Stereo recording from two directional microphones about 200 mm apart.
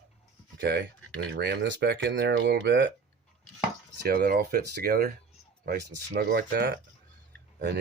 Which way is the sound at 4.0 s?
45° right (ahead or behind).